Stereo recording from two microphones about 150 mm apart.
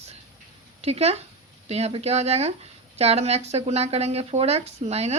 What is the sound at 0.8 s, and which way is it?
Speech, 45° right (ahead or behind).